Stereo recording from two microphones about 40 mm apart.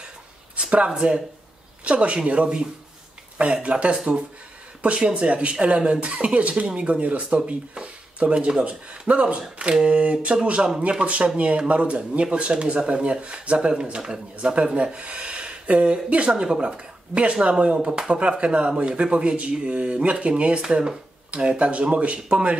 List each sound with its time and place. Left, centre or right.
0.7 s speech: right
3.9 s speech: right
18.4 s speech: right